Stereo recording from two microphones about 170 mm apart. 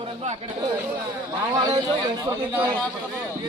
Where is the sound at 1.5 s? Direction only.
20° right (ahead or behind).